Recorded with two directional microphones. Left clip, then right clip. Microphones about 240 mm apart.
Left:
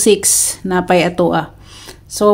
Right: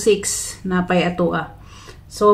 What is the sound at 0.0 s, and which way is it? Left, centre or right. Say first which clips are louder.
Speech: left 5 dB; left.